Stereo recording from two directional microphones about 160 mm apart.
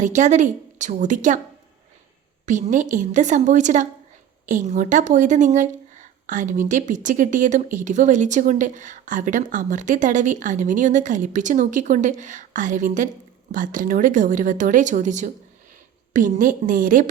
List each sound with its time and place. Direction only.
0.0 s speech: 50° right (ahead or behind)
2.5 s speech: 50° right (ahead or behind)